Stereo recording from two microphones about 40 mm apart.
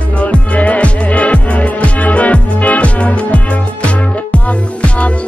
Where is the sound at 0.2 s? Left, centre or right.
Left.